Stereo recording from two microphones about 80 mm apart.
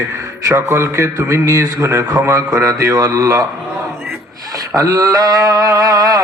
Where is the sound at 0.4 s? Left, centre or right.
Right.